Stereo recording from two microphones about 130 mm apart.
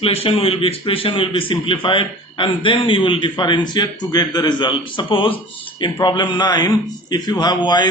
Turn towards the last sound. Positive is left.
turn(degrees=35)  # may be behind; listen again after turning